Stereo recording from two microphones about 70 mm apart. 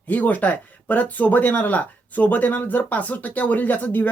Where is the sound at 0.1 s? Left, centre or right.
Left.